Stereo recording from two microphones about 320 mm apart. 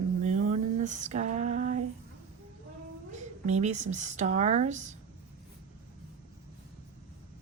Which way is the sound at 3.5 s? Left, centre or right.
Right.